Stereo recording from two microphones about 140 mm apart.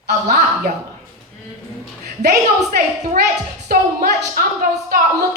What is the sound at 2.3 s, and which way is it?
A woman's voice, 90° right.